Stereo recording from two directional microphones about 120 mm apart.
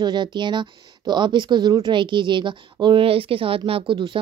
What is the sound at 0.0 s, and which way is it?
Speech, 40° right (ahead or behind).